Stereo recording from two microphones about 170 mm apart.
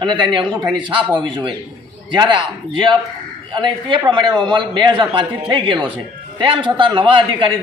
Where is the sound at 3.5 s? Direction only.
30° right (ahead or behind).